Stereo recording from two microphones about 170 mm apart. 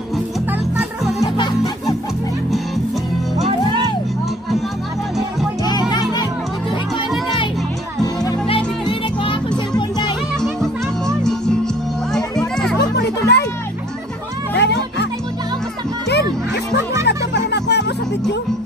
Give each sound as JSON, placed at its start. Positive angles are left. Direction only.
{"t": 1.2, "sound": "music", "side_deg": 20}
{"t": 3.4, "sound": "music", "side_deg": -30}
{"t": 5.7, "sound": "music", "side_deg": 25}
{"t": 8.0, "sound": "music", "side_deg": 20}
{"t": 10.4, "sound": "music", "side_deg": 0}
{"t": 12.7, "sound": "music", "side_deg": 80}
{"t": 14.6, "sound": "music", "side_deg": 90}
{"t": 17.0, "sound": "music", "side_deg": 85}